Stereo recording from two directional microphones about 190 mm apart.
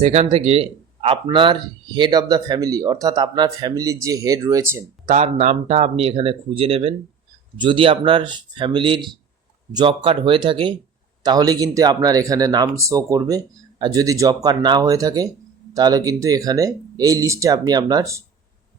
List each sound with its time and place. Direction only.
0.0 s speech: 35° right (ahead or behind); by 4.8 s 15° right (ahead or behind)
5.0 s speech: 35° right (ahead or behind); by 18.2 s 20° right (ahead or behind)